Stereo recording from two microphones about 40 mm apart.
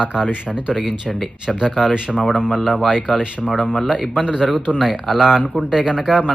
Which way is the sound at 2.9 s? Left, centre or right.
Centre.